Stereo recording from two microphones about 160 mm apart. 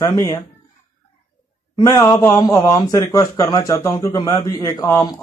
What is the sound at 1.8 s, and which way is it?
A man's voice, 20° left (ahead or behind).